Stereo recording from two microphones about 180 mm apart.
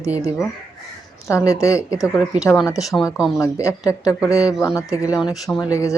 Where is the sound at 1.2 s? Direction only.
15° left (ahead or behind).